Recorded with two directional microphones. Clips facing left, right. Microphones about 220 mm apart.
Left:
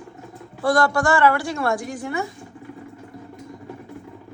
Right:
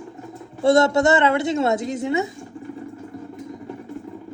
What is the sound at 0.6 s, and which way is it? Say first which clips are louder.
A woman's voice: right 4 dB; 25° right (ahead or behind).